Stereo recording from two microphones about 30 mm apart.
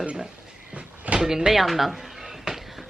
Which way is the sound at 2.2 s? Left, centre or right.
Centre.